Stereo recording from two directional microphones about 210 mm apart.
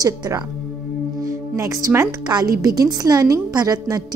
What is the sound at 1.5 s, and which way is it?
A woman's voice, 15° right (ahead or behind).